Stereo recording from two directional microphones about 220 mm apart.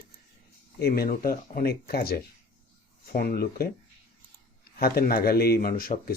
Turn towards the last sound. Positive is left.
turn(degrees=40)  # may be behind; listen again after turning